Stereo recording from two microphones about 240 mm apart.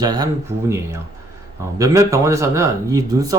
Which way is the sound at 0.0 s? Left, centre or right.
Centre.